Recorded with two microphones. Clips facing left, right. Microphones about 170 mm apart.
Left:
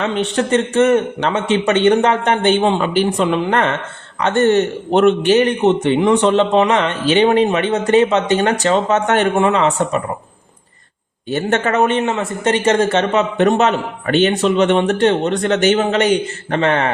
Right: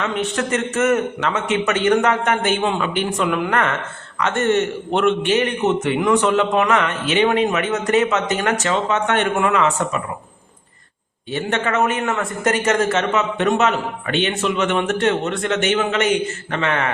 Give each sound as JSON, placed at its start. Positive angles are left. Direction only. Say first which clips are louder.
{"t": 0.0, "sound": "a man's voice", "louder": "left 4 dB", "side_deg": 30}
{"t": 9.3, "sound": "a man's voice", "louder": "left 3 dB", "side_deg": 30}
{"t": 11.3, "sound": "a man's voice", "louder": "left 4 dB", "side_deg": 45}